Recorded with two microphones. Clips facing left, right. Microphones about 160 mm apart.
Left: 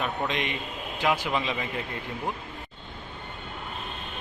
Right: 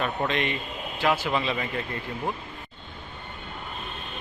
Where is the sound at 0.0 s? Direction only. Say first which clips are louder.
Right 2 dB; 10° left (ahead or behind).